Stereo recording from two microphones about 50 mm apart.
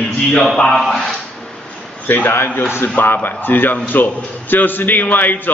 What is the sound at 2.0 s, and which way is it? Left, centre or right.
A man's voice, left.